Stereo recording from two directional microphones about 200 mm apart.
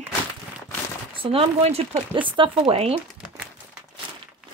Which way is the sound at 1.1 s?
25° right (ahead or behind).